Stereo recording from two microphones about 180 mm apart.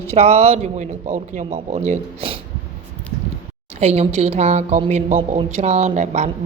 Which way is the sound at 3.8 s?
35° right (ahead or behind).